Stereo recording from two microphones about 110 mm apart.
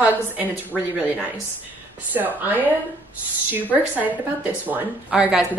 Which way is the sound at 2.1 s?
15° right (ahead or behind).